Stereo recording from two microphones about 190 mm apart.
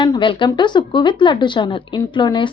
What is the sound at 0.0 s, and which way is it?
Speech, 25° left (ahead or behind).